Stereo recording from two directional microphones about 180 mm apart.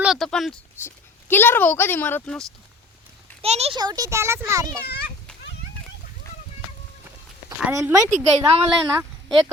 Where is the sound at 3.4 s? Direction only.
35° right (ahead or behind).